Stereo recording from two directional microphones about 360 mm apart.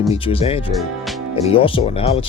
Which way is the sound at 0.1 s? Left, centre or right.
Centre.